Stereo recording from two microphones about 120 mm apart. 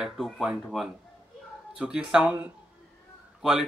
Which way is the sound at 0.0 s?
5° right (ahead or behind).